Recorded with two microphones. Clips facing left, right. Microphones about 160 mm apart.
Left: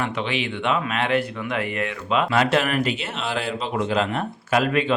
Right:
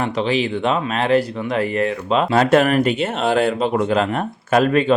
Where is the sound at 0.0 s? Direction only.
35° right (ahead or behind).